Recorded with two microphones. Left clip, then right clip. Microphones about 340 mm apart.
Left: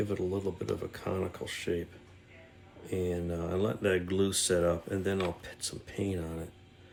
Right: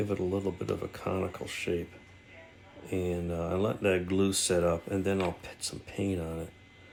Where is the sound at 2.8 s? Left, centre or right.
Centre.